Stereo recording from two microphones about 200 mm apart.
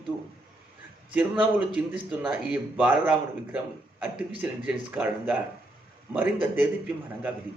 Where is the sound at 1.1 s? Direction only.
5° right (ahead or behind).